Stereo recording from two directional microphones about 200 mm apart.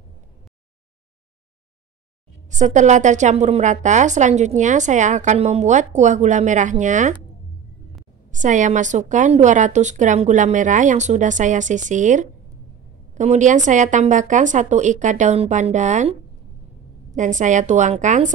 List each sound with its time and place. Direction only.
2.5 s a woman's voice: 35° right (ahead or behind)
8.3 s a woman's voice: 40° right (ahead or behind)